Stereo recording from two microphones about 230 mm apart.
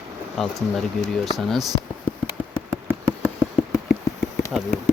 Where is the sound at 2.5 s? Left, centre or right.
Centre.